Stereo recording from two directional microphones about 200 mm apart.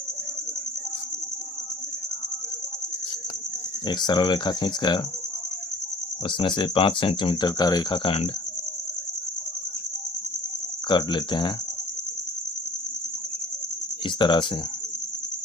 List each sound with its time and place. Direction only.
3.8 s speech: 20° left (ahead or behind)
6.2 s speech: 25° left (ahead or behind)
10.8 s speech: 20° left (ahead or behind)
14.0 s speech: 25° left (ahead or behind)